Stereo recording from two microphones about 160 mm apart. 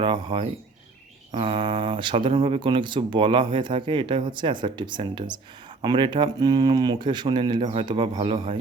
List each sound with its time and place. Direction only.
0.0 s speech: 30° right (ahead or behind)